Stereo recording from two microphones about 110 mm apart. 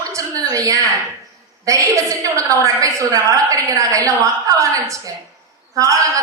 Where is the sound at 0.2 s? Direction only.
30° right (ahead or behind).